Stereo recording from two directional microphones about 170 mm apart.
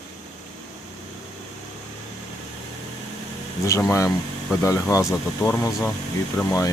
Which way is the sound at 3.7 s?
20° left (ahead or behind).